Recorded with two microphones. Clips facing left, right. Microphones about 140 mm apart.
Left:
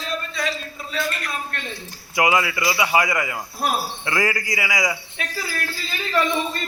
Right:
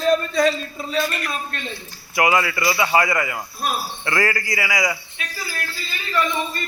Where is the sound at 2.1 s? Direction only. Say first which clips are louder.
Right 1 dB; 20° left (ahead or behind).